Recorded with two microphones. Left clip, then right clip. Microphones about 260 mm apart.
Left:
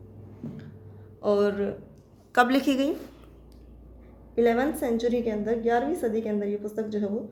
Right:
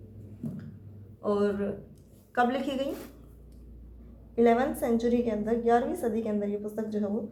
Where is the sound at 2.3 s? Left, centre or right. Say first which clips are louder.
Left 5 dB; left.